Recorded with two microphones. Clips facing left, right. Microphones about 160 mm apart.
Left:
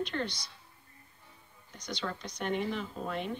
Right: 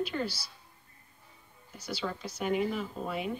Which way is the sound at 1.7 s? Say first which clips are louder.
Right 2 dB; 5° right (ahead or behind).